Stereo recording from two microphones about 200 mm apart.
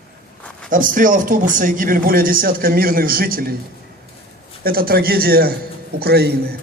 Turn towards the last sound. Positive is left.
turn(degrees=-50)  # may be behind; listen again after turning